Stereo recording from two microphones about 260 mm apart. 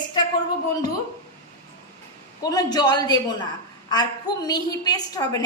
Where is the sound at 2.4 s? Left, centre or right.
Centre.